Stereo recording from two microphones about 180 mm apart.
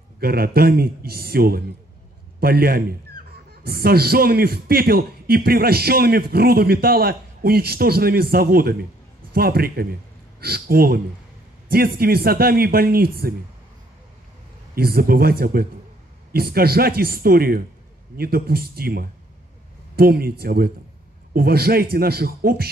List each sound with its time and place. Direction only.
0.2 s a man's voice: 60° right (ahead or behind)
14.8 s a man's voice: 55° right (ahead or behind)